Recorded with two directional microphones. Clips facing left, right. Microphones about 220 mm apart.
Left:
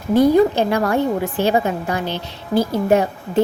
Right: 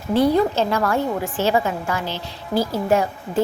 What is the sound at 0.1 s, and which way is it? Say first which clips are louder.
A woman's voice: left 4 dB; 15° left (ahead or behind).